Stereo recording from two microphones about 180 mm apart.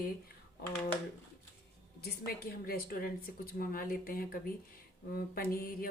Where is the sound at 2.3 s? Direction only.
55° left (ahead or behind).